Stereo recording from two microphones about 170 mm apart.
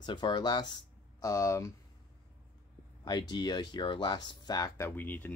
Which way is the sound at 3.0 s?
25° left (ahead or behind).